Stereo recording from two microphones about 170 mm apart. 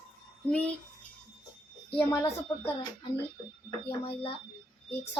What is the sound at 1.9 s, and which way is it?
Speech, 35° left (ahead or behind).